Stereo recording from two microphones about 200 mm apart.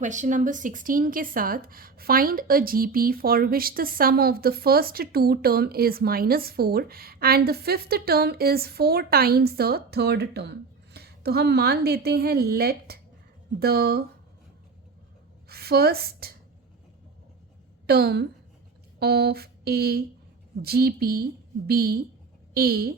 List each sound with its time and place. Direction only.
0.0 s speech: 40° right (ahead or behind)
15.4 s a woman's voice: 50° right (ahead or behind)
17.8 s speech: 50° right (ahead or behind)